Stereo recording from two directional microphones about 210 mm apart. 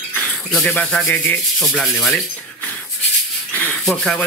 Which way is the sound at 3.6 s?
5° left (ahead or behind).